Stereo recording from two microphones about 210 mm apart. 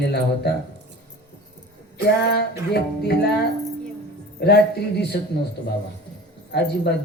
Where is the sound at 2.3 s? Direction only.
50° left (ahead or behind).